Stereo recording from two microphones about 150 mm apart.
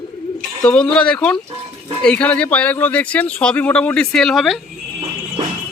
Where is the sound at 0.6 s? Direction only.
5° left (ahead or behind).